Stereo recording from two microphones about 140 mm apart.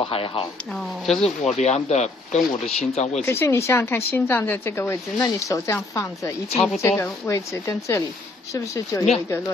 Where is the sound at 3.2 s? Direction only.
15° left (ahead or behind).